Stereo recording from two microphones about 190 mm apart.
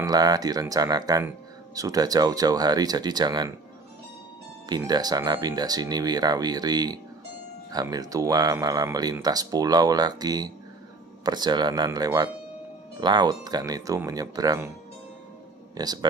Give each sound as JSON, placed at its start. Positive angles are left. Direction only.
{"t": 0.0, "sound": "speech", "side_deg": -20}
{"t": 4.6, "sound": "speech", "side_deg": -20}
{"t": 15.7, "sound": "speech", "side_deg": -20}